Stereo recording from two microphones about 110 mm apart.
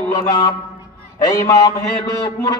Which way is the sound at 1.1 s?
30° left (ahead or behind).